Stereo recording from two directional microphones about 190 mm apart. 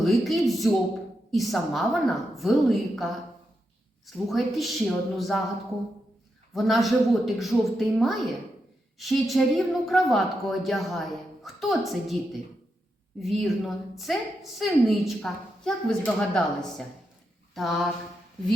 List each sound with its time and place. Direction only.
0.0 s a woman's voice: centre (ahead or behind)
6.5 s a woman's voice: centre (ahead or behind)
13.1 s a woman's voice: centre (ahead or behind)